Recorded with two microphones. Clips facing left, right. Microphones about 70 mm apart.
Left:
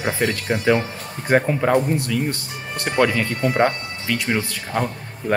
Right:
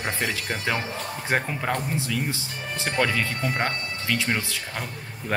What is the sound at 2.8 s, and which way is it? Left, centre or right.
Speech, centre.